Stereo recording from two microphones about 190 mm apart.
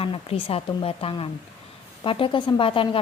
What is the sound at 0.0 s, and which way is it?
A woman's voice, 30° left (ahead or behind).